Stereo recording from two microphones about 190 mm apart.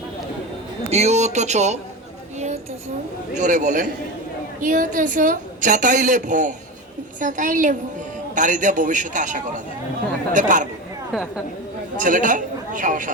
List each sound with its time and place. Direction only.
0.9 s a man's voice: 35° right (ahead or behind)
3.3 s a man's voice: 40° right (ahead or behind)
11.9 s a woman's voice: 45° right (ahead or behind)